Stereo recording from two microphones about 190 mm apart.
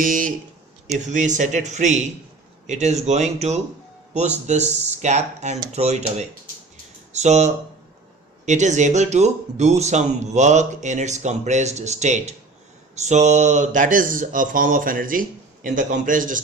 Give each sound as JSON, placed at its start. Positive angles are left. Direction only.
{"t": 0.0, "sound": "a man's voice", "side_deg": -45}